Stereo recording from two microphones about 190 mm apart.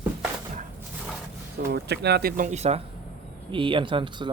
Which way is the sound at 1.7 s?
60° right (ahead or behind).